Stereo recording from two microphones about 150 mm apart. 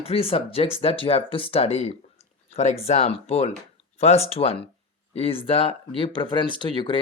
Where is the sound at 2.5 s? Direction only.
50° left (ahead or behind).